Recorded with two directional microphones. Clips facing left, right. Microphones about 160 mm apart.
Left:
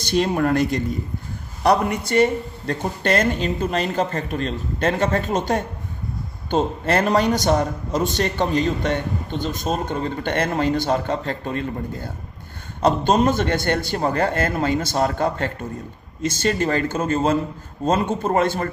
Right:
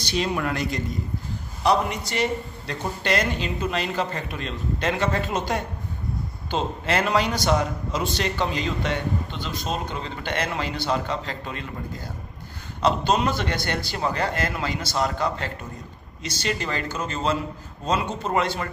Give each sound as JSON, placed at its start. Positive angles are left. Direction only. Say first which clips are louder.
{"t": 0.0, "sound": "a man's voice", "louder": "left 6 dB", "side_deg": 50}